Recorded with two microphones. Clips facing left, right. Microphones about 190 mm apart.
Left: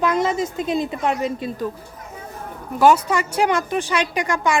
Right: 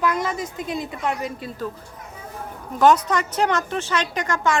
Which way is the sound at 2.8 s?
10° left (ahead or behind).